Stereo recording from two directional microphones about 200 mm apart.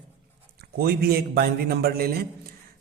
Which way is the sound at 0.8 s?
50° right (ahead or behind).